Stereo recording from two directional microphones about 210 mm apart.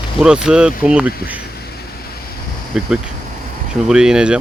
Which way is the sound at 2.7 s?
5° right (ahead or behind).